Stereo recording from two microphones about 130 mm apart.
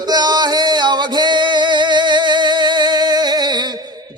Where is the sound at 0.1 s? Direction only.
35° right (ahead or behind).